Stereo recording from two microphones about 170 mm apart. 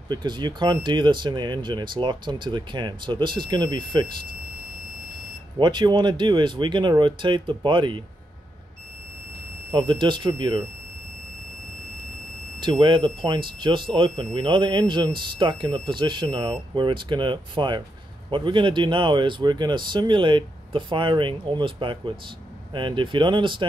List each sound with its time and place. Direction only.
0.1 s speech: 25° right (ahead or behind)
5.6 s speech: 25° right (ahead or behind)
9.7 s speech: 25° right (ahead or behind)
12.5 s speech: 30° right (ahead or behind)